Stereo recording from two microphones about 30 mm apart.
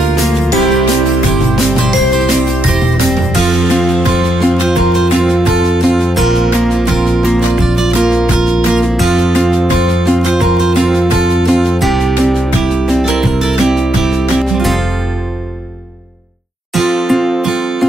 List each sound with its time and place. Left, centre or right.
0.1 s music: centre
3.1 s music: centre
4.1 s music: right
9.0 s music: centre
11.8 s music: centre
13.2 s music: centre
16.7 s music: centre